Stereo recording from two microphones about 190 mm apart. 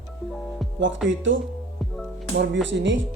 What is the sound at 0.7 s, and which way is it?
Speech, 75° right (ahead or behind).